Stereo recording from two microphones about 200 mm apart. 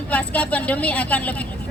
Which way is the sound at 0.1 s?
5° left (ahead or behind).